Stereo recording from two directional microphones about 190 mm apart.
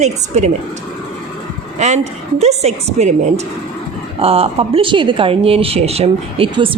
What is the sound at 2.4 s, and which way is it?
Speech, 35° right (ahead or behind).